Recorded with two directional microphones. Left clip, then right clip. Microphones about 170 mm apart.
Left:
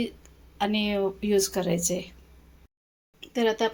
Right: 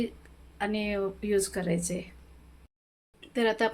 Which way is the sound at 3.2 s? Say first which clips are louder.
Left 2 dB; 10° left (ahead or behind).